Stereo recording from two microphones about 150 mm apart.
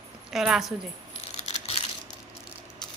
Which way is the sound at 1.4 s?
45° left (ahead or behind).